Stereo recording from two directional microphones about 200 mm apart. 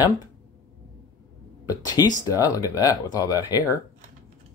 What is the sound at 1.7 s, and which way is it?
Speech, 15° left (ahead or behind).